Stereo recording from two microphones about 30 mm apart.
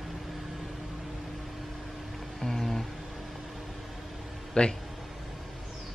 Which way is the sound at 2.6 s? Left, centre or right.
Centre.